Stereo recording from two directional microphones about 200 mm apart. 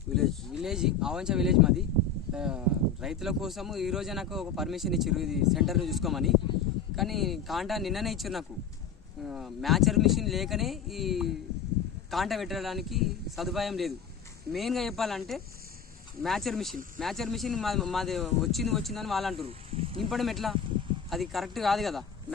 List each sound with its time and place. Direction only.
0.1 s speech: centre (ahead or behind)
19.5 s snake: 30° right (ahead or behind)
20.0 s speech: centre (ahead or behind)